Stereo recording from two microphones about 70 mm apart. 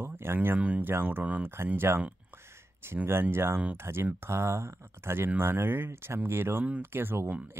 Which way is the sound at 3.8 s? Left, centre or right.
Right.